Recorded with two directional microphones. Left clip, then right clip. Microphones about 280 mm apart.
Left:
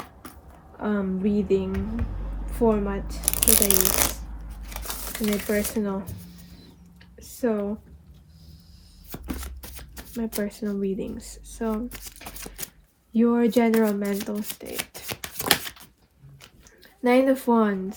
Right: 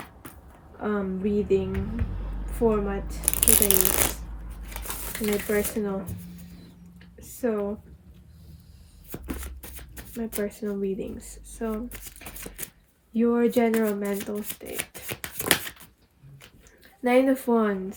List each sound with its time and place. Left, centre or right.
0.8 s speech: centre
7.5 s speech: centre
9.0 s shuffling cards: centre
13.1 s speech: centre
15.0 s shuffling cards: centre
17.0 s speech: centre